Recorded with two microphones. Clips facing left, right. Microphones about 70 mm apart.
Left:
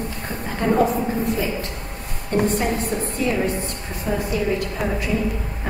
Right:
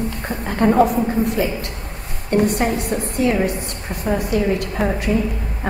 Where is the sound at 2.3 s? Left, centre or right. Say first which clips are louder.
Right 3 dB; right.